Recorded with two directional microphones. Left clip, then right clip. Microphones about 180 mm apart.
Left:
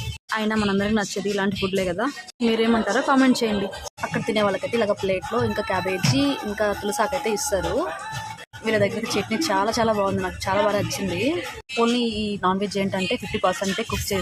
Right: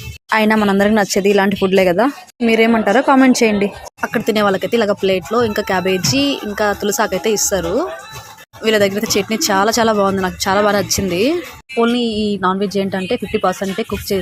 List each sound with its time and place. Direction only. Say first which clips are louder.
0.3 s speech: right 10 dB; 30° right (ahead or behind)
4.0 s speech: right 7 dB; 20° right (ahead or behind)